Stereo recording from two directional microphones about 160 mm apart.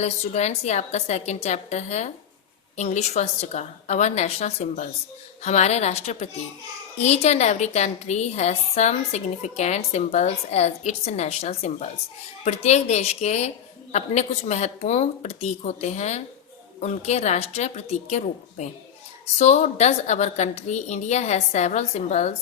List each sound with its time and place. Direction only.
0.0 s a woman's voice: 45° left (ahead or behind)